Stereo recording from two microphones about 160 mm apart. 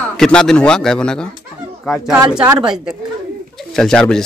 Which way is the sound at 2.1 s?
25° right (ahead or behind).